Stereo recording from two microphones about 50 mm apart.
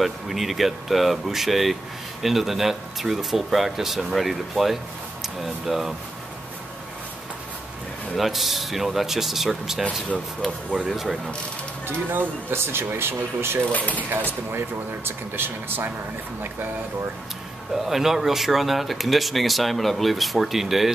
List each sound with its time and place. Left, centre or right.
0.0 s speech: centre
8.2 s speech: centre
10.9 s speech: centre
12.1 s speech: right
13.7 s speech: left
15.0 s speech: right
17.7 s speech: centre